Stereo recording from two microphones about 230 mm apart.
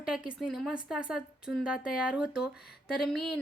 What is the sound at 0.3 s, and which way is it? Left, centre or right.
Speech, centre.